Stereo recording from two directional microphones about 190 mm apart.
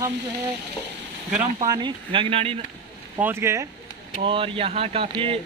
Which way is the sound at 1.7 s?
25° right (ahead or behind).